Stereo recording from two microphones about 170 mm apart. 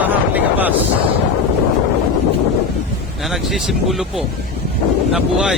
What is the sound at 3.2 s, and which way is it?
Speech, centre (ahead or behind).